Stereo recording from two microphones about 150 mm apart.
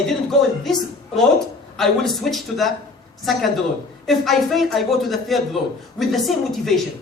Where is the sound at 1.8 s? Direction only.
Centre (ahead or behind).